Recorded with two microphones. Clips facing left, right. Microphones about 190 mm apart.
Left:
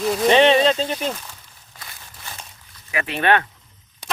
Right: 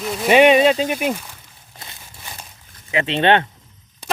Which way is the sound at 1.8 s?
25° right (ahead or behind).